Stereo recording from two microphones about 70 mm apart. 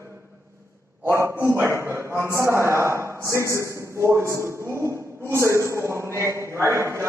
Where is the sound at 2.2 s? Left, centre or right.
Right.